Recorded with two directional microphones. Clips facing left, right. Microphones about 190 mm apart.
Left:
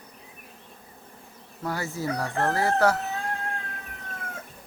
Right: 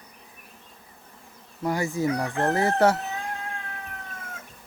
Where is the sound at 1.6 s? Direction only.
15° right (ahead or behind).